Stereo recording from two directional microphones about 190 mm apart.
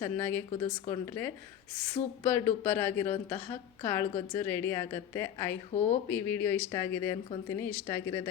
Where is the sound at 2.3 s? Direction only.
10° left (ahead or behind).